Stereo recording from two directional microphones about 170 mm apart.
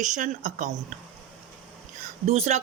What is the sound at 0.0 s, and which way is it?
Speech, 50° right (ahead or behind).